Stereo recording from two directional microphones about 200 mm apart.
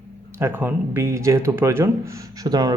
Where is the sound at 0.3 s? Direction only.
10° right (ahead or behind).